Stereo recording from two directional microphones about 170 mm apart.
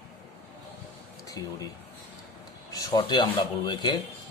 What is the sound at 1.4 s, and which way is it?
Mantra, 20° left (ahead or behind).